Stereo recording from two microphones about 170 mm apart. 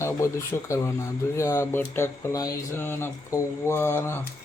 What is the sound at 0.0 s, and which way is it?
Speech, 15° left (ahead or behind).